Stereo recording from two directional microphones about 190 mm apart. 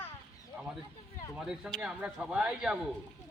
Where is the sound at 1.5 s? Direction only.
5° right (ahead or behind).